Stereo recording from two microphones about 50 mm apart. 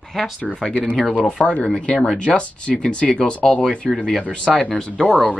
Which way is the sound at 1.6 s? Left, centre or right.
Centre.